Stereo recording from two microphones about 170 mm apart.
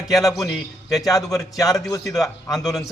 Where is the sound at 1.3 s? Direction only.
20° left (ahead or behind).